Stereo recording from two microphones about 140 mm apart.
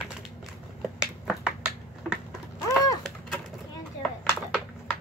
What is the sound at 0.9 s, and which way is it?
Finger snapping, 5° right (ahead or behind).